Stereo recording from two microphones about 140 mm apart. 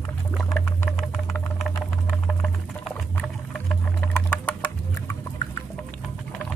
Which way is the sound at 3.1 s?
5° left (ahead or behind).